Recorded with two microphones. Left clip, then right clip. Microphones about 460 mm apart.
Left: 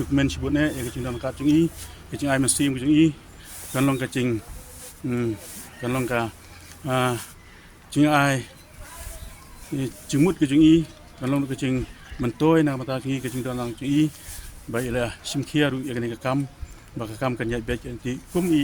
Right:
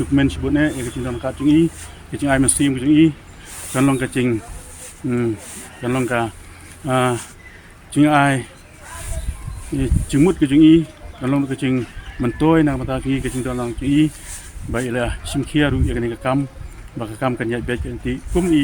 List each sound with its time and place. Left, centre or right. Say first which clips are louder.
0.2 s speech: right 4 dB; left
9.7 s speech: right 5 dB; left